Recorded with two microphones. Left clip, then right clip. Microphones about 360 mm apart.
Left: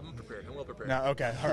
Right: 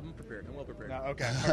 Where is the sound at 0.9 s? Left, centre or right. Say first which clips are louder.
Left 7 dB; left.